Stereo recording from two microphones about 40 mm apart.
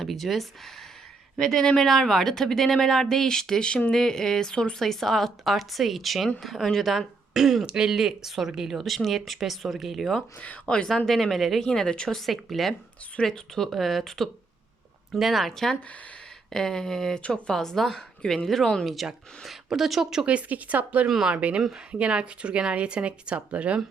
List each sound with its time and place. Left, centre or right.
0.0 s speech: centre
1.5 s speech: centre
3.9 s speech: centre
4.8 s speech: centre
7.6 s speech: centre
10.4 s a woman's voice: left
10.8 s speech: centre
11.6 s speech: centre
12.0 s speech: centre
17.2 s speech: left
17.5 s speech: centre
19.5 s speech: centre
20.2 s speech: right
21.2 s speech: right